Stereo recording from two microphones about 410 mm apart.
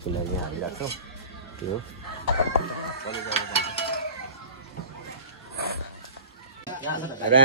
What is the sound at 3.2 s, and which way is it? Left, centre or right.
Mechanisms, centre.